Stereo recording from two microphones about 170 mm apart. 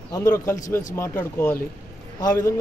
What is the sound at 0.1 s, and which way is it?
Speech, 20° left (ahead or behind).